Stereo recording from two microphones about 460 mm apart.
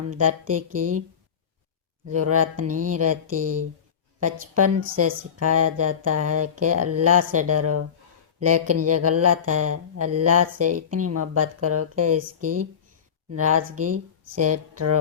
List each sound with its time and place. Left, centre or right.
0.1 s speech: right
2.0 s speech: right